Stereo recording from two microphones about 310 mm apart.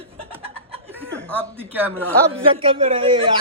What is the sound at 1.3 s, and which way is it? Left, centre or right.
Speech, centre.